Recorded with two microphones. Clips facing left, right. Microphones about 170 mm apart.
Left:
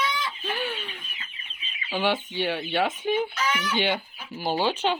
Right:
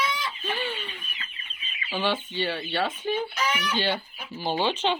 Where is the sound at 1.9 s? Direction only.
15° left (ahead or behind).